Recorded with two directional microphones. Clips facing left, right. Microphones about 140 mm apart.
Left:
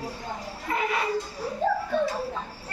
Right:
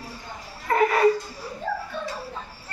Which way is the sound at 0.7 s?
50° right (ahead or behind).